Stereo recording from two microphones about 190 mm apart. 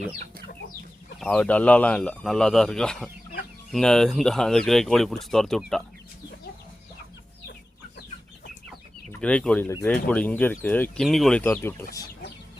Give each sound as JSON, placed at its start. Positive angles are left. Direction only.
{"t": 1.2, "sound": "speech", "side_deg": 5}
{"t": 9.2, "sound": "speech", "side_deg": 5}